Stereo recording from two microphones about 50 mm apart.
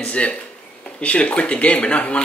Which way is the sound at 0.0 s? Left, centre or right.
Left.